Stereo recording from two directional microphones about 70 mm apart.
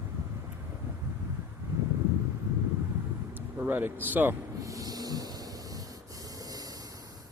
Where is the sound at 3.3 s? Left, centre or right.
Right.